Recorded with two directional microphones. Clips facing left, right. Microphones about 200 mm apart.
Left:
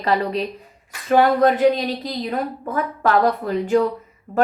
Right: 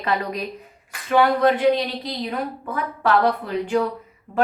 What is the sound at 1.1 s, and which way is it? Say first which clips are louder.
A woman's voice: left 2 dB; 50° left (ahead or behind).